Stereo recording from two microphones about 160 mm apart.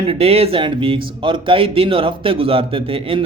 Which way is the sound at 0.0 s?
40° right (ahead or behind).